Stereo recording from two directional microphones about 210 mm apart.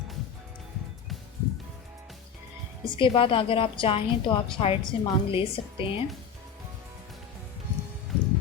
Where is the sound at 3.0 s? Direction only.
25° left (ahead or behind).